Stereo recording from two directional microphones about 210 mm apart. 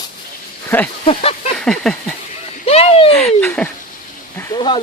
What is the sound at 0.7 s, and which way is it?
Speech, 10° left (ahead or behind).